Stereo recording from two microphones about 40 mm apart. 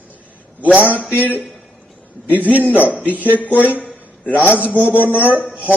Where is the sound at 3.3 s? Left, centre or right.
Left.